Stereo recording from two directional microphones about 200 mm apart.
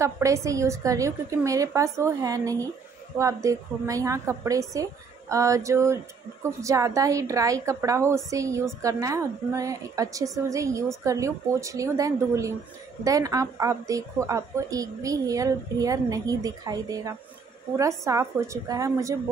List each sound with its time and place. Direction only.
0.0 s a woman's voice: 15° right (ahead or behind)